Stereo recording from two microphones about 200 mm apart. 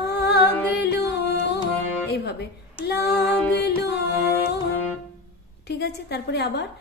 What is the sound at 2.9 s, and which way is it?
Music, 55° left (ahead or behind).